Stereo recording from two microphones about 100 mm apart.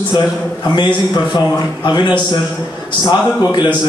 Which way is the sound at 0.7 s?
45° left (ahead or behind).